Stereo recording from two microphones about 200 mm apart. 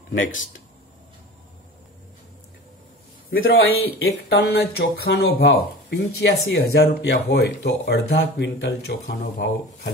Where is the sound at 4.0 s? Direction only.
55° left (ahead or behind).